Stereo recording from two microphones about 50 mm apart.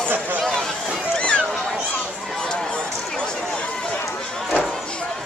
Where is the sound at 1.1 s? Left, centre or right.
Left.